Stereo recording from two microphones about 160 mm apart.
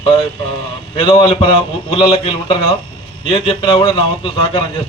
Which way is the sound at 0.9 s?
35° left (ahead or behind).